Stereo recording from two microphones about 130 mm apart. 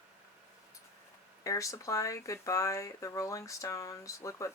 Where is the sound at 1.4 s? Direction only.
25° left (ahead or behind).